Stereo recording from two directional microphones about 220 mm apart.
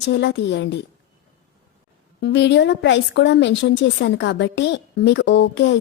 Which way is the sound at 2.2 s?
50° left (ahead or behind).